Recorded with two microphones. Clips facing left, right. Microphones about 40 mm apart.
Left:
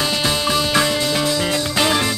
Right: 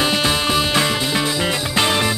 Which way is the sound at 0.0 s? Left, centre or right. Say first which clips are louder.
Right 2 dB; centre.